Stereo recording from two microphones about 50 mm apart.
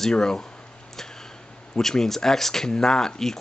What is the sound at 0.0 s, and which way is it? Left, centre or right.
Speech, centre.